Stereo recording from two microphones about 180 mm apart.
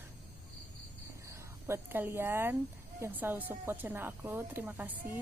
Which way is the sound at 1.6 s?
15° right (ahead or behind).